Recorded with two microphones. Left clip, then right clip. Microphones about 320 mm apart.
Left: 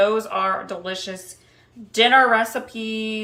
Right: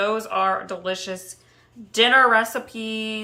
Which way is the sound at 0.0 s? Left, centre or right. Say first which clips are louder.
Left 2 dB; centre.